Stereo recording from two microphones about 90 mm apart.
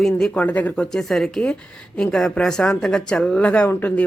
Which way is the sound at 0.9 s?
5° left (ahead or behind).